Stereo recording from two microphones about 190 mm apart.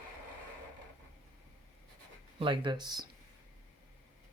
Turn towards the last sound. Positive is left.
turn(degrees=-20)  # may be behind; listen again after turning